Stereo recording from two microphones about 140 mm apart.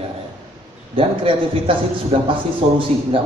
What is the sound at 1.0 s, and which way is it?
A man's voice, 40° right (ahead or behind).